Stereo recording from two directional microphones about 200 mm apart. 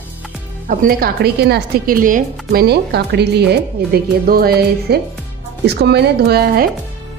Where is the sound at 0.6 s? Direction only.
45° right (ahead or behind).